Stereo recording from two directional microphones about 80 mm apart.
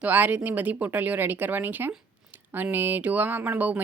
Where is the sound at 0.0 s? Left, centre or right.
Right.